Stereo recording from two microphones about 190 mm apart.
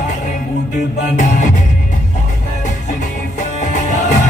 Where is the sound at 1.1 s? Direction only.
40° left (ahead or behind).